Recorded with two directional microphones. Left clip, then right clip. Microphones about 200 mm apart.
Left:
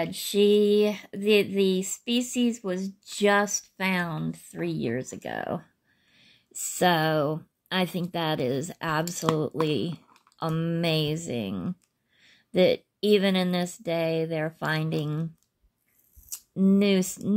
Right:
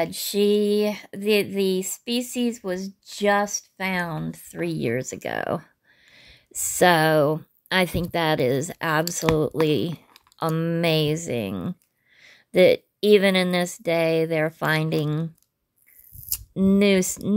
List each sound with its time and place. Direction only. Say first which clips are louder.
0.0 s speech: right 1 dB; 30° right (ahead or behind); by 4.1 s 15° right (ahead or behind)
4.1 s speech: right 2 dB; 30° right (ahead or behind)
16.3 s speech: right 3 dB; 30° right (ahead or behind)